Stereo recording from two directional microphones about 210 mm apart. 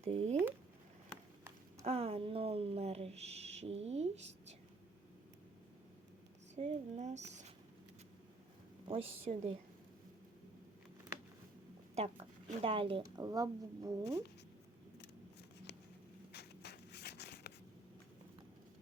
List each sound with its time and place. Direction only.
0.0 s a woman's voice: 30° right (ahead or behind)
1.1 s run: 5° left (ahead or behind)
1.8 s speech: 30° right (ahead or behind)
6.6 s speech: 35° right (ahead or behind)
8.9 s a woman's voice: 25° right (ahead or behind)
11.9 s a woman's voice: 30° right (ahead or behind)
16.3 s a sound: 50° left (ahead or behind)